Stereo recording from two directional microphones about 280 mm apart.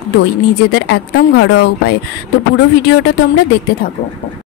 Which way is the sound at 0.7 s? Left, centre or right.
Left.